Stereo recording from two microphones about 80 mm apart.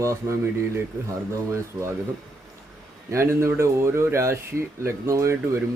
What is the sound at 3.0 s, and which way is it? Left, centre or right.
Speech, right.